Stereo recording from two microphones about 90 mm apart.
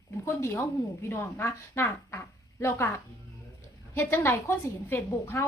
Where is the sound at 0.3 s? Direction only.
30° left (ahead or behind).